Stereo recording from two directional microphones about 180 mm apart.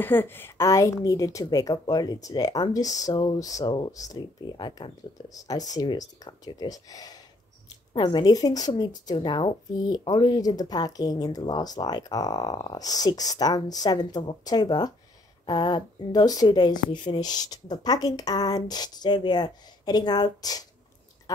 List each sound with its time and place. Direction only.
0.0 s speech: 10° left (ahead or behind)